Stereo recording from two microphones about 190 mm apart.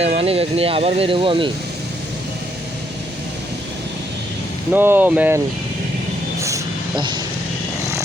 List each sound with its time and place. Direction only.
0.0 s speech: 30° right (ahead or behind)
4.7 s speech: 10° right (ahead or behind)
6.4 s a sound: 20° right (ahead or behind)